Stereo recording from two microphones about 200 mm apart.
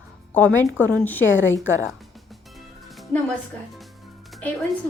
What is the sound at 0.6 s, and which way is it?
Speech, 5° left (ahead or behind).